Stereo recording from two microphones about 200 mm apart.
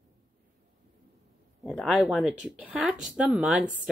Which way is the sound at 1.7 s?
5° right (ahead or behind).